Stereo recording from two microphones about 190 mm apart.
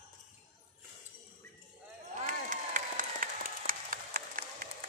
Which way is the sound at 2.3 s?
45° right (ahead or behind).